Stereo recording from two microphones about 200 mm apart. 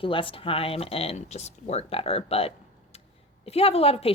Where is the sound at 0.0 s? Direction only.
25° left (ahead or behind).